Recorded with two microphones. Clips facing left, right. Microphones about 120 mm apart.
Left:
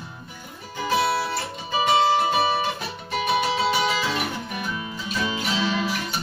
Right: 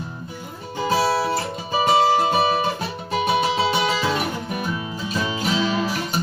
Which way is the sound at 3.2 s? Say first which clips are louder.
Right 2 dB; 35° right (ahead or behind).